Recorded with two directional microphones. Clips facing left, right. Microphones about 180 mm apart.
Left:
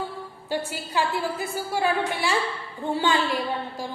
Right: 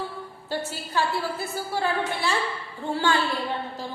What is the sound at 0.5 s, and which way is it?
A woman's voice, 15° left (ahead or behind).